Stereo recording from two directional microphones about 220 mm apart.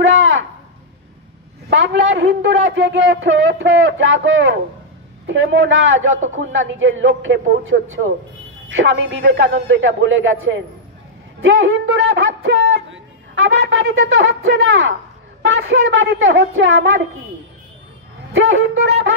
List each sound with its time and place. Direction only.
0.1 s a sound: 60° right (ahead or behind)
1.7 s a man's voice: 55° right (ahead or behind)
18.3 s a man's voice: 60° right (ahead or behind)